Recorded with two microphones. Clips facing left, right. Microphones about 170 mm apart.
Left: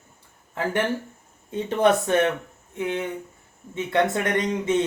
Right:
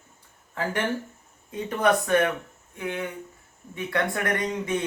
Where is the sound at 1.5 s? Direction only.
25° left (ahead or behind).